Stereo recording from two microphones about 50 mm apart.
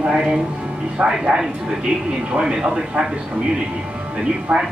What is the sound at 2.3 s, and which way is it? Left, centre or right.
Speech, centre.